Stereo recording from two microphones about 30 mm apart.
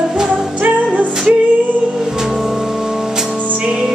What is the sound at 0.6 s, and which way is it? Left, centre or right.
Music, right.